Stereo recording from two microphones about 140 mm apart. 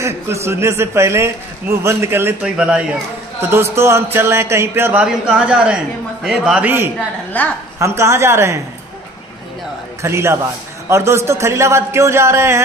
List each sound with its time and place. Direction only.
0.0 s a man's voice: 20° right (ahead or behind)
5.0 s a man's voice: 5° right (ahead or behind)
7.3 s a woman's voice: 10° left (ahead or behind)
7.8 s a man's voice: 20° right (ahead or behind)
10.0 s a man's voice: 20° right (ahead or behind)